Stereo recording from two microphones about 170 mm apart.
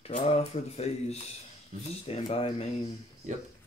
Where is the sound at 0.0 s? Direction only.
35° left (ahead or behind).